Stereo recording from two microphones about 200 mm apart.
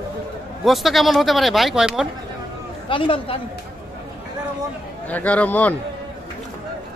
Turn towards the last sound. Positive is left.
turn(degrees=10)  # may be behind; listen again after turning